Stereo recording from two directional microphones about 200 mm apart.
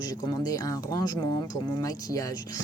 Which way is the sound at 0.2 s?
20° left (ahead or behind).